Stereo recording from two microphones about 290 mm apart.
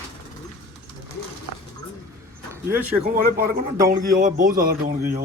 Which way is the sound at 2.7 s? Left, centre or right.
Right.